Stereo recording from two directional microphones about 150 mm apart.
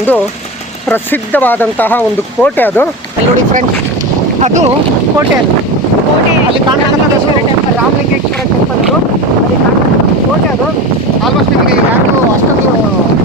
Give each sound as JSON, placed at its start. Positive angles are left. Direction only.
{"t": 0.9, "sound": "speech", "side_deg": 10}
{"t": 4.4, "sound": "speech", "side_deg": -50}